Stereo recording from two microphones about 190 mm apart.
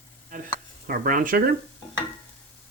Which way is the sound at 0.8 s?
45° right (ahead or behind).